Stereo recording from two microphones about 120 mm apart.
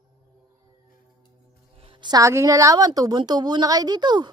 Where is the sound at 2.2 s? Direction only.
25° right (ahead or behind).